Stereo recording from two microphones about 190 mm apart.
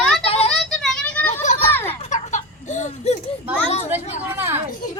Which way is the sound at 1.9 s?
35° left (ahead or behind).